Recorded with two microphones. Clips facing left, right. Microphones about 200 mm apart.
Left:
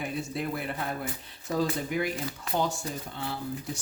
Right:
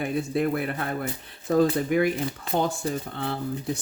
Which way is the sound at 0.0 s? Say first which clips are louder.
Right 7 dB; 60° right (ahead or behind).